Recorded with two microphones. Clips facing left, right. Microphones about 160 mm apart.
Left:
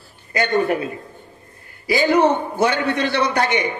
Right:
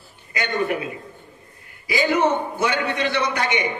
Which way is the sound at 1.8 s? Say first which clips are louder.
Left 4 dB; 35° left (ahead or behind).